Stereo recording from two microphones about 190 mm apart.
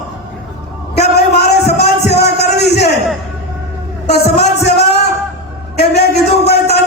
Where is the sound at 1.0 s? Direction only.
60° left (ahead or behind).